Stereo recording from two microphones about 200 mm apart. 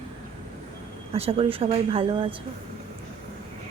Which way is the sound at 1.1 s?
30° right (ahead or behind).